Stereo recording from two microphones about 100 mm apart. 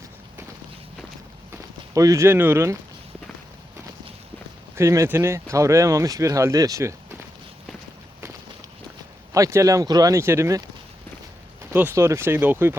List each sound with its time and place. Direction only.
1.9 s speech: 35° right (ahead or behind)
4.8 s speech: 30° right (ahead or behind)
9.3 s speech: 30° right (ahead or behind)
11.9 s speech: 30° right (ahead or behind)